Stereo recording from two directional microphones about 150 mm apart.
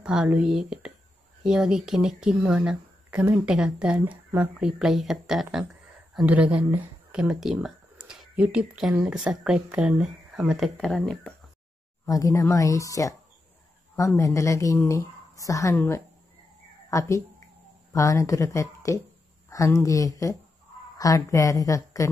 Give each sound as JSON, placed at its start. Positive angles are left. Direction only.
{"t": 0.0, "sound": "speech", "side_deg": -5}
{"t": 12.1, "sound": "a woman's voice", "side_deg": 20}
{"t": 17.9, "sound": "a woman's voice", "side_deg": 20}